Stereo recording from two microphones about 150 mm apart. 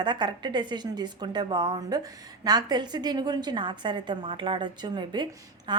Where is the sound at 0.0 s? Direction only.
30° right (ahead or behind).